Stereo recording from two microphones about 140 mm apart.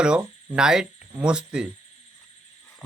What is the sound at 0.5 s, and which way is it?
Speech, 5° right (ahead or behind).